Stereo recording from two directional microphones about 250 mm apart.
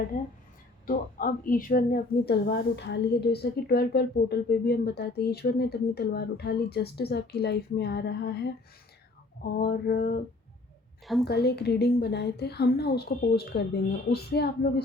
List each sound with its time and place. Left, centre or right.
0.9 s a woman's voice: left
11.0 s a woman's voice: centre
11.3 s a woman's voice: left